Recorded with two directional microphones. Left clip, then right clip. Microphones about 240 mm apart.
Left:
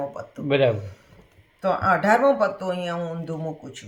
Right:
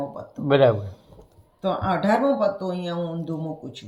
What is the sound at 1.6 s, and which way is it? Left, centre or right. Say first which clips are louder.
Speech: left 3 dB; left.